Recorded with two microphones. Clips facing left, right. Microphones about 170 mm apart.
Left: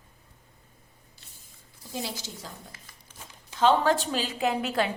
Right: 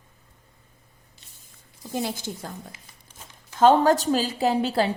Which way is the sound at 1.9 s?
55° right (ahead or behind).